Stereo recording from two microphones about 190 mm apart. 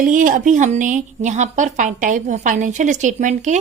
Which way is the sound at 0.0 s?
45° right (ahead or behind).